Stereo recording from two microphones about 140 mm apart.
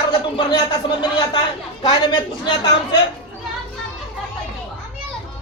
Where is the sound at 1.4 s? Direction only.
30° left (ahead or behind).